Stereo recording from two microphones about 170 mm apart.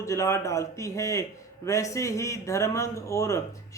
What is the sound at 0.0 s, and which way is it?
Speech, 15° left (ahead or behind).